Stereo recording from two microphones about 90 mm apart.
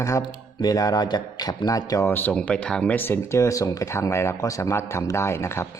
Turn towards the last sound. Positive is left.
turn(degrees=30)  # may be behind; listen again after turning